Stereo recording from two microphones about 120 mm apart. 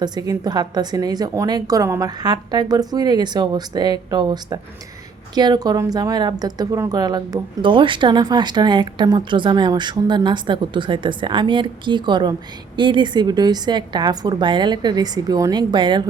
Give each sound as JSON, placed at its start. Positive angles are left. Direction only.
{"t": 0.0, "sound": "speech", "side_deg": -35}
{"t": 7.6, "sound": "speech", "side_deg": -45}